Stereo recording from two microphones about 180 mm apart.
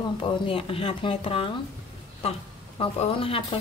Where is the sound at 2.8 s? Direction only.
30° left (ahead or behind).